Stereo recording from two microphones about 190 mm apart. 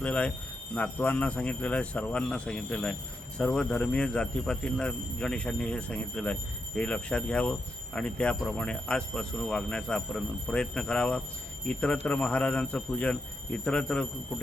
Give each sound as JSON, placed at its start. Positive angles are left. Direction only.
{"t": 0.0, "sound": "speech", "side_deg": 5}